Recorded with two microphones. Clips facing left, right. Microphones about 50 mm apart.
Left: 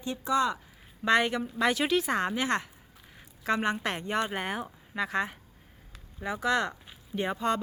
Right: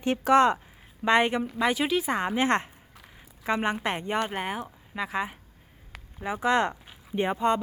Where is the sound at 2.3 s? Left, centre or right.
Right.